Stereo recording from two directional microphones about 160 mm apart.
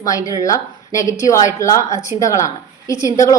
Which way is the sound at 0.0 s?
20° left (ahead or behind).